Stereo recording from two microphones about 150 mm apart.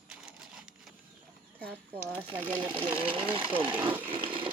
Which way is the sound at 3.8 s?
10° right (ahead or behind).